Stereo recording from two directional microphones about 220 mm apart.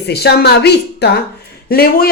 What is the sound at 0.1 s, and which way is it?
Speech, 45° left (ahead or behind).